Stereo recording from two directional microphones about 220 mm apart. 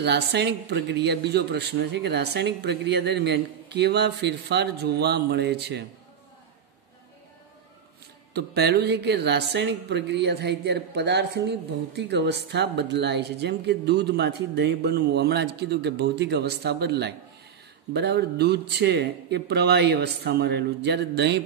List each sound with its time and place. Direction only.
0.0 s speech: 50° right (ahead or behind)
8.3 s speech: 50° right (ahead or behind)